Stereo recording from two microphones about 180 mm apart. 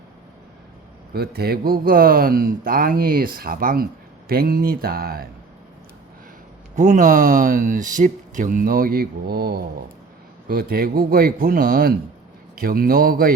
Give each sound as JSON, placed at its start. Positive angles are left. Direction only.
{"t": 1.1, "sound": "speech", "side_deg": -60}
{"t": 6.7, "sound": "speech", "side_deg": -40}